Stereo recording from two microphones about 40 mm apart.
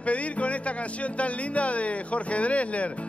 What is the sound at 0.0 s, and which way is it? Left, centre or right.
Speech, left.